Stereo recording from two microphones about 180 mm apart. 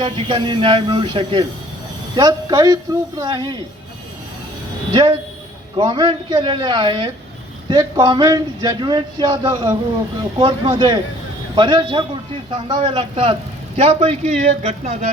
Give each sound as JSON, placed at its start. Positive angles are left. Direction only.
{"t": 0.0, "sound": "speech", "side_deg": -25}
{"t": 4.9, "sound": "a man's voice", "side_deg": -25}